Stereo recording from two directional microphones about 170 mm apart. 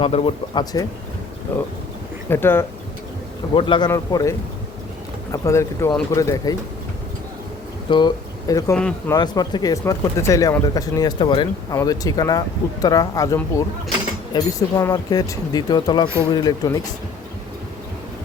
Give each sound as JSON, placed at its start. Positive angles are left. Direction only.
{"t": 0.0, "sound": "speech", "side_deg": 35}
{"t": 2.3, "sound": "speech", "side_deg": 15}
{"t": 3.5, "sound": "speech", "side_deg": 30}
{"t": 7.9, "sound": "speech", "side_deg": 25}